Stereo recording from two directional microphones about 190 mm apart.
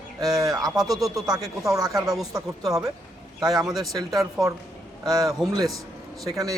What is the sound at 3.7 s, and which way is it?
Speech, centre (ahead or behind).